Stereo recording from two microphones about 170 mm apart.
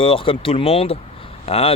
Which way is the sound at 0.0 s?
30° left (ahead or behind).